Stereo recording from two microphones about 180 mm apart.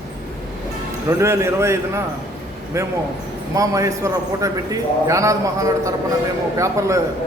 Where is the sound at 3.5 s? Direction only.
20° right (ahead or behind).